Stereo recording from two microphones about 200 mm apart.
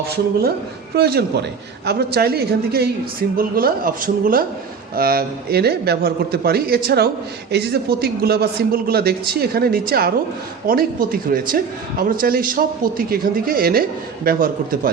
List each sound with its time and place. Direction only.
0.9 s a woman's voice: 50° right (ahead or behind)